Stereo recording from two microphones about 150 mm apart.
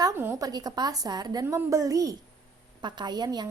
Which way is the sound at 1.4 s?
15° right (ahead or behind).